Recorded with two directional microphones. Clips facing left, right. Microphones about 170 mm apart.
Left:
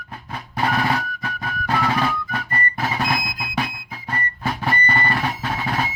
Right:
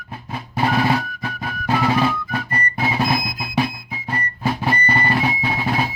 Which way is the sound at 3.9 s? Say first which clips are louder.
Right 2 dB; 10° right (ahead or behind).